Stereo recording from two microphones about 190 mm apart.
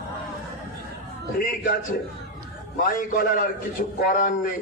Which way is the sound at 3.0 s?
45° left (ahead or behind).